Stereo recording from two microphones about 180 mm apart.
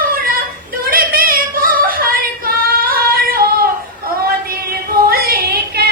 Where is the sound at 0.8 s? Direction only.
55° right (ahead or behind).